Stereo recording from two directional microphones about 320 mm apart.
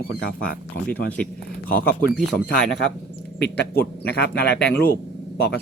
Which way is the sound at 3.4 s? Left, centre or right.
Left.